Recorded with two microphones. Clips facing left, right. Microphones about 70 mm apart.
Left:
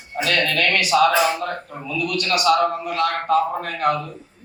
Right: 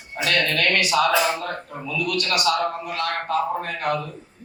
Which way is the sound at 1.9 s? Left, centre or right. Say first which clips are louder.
Left 2 dB; left.